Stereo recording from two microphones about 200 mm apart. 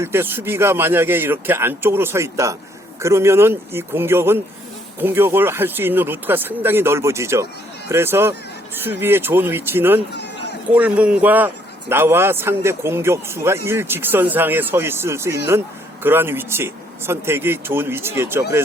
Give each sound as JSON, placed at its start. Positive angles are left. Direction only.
{"t": 0.0, "sound": "a man's voice", "side_deg": -10}
{"t": 10.1, "sound": "a sound", "side_deg": 55}
{"t": 10.8, "sound": "a man's voice", "side_deg": -5}